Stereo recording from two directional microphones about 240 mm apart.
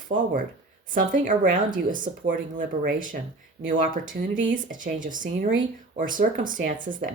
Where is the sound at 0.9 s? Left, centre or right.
Right.